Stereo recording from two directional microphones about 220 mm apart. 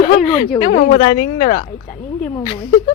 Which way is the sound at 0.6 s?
30° left (ahead or behind).